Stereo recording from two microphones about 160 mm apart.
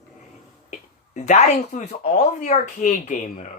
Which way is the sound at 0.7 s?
50° left (ahead or behind).